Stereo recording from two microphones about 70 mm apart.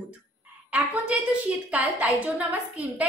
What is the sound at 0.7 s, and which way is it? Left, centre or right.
A woman's voice, right.